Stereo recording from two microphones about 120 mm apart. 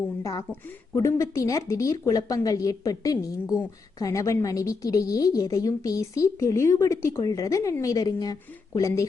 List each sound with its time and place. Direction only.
0.2 s a woman's voice: 30° left (ahead or behind)